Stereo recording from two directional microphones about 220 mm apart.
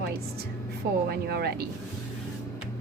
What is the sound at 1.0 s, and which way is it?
Speech, 45° right (ahead or behind).